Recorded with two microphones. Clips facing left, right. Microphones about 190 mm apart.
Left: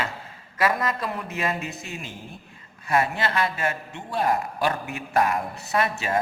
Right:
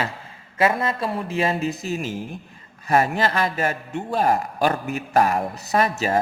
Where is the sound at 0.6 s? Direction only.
30° right (ahead or behind).